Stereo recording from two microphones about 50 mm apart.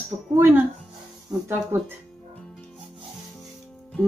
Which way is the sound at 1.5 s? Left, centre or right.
Right.